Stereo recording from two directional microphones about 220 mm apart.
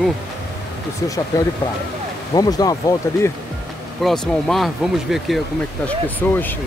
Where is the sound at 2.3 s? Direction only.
15° left (ahead or behind).